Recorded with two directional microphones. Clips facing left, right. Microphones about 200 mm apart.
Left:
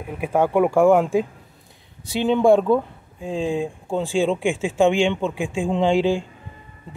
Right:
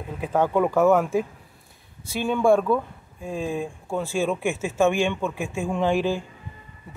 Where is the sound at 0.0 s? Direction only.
10° left (ahead or behind).